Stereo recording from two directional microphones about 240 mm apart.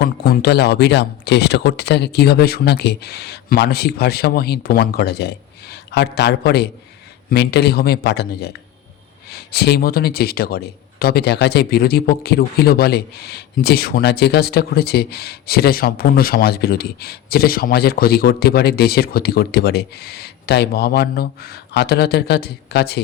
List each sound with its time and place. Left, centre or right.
0.0 s speech: left